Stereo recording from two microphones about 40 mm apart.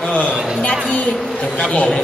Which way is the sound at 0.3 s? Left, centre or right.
Centre.